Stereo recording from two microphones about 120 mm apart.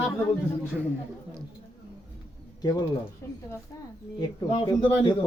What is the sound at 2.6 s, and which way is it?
Speech, 35° left (ahead or behind).